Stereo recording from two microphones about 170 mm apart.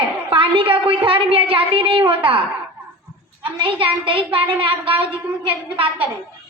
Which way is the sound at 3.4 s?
30° right (ahead or behind).